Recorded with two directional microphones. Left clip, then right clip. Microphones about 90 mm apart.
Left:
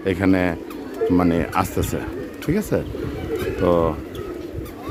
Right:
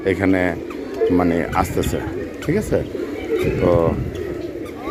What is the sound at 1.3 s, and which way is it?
Speech, 40° left (ahead or behind).